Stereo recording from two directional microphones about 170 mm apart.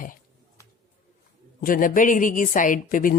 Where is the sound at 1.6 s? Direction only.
55° left (ahead or behind).